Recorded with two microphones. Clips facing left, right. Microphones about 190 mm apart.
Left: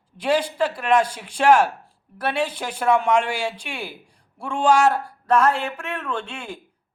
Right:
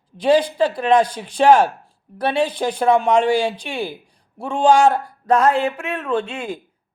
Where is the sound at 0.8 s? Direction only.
20° right (ahead or behind).